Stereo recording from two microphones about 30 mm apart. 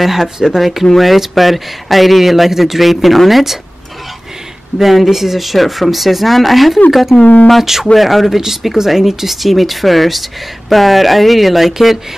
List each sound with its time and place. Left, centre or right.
0.0 s speech: centre
4.7 s speech: centre
7.1 s speech: left
7.8 s speech: centre